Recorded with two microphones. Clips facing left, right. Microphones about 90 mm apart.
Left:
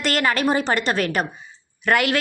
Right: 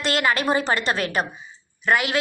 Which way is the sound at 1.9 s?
60° left (ahead or behind).